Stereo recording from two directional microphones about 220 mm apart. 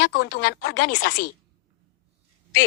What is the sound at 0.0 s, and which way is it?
Speech, 50° left (ahead or behind).